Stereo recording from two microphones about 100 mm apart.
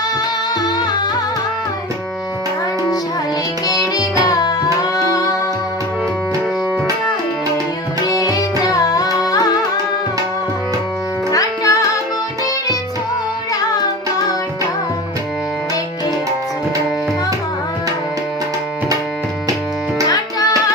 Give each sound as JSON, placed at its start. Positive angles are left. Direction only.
{"t": 3.7, "sound": "music", "side_deg": 40}
{"t": 8.0, "sound": "music", "side_deg": 40}
{"t": 11.3, "sound": "music", "side_deg": 35}